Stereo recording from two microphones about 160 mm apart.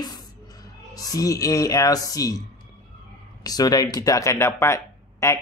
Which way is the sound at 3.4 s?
25° left (ahead or behind).